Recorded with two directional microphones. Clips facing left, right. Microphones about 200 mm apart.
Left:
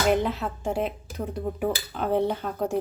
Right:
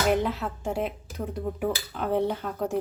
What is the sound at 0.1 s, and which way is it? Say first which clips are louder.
Speech: left 1 dB; 20° left (ahead or behind).